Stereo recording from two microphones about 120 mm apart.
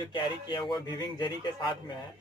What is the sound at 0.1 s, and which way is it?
Speech, 40° left (ahead or behind).